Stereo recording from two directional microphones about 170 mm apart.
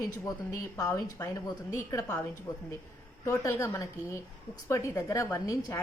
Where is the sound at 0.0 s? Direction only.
20° left (ahead or behind).